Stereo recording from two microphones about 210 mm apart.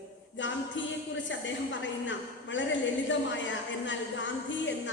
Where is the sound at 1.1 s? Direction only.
60° left (ahead or behind).